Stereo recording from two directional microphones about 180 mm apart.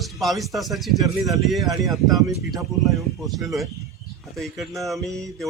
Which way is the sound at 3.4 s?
Centre (ahead or behind).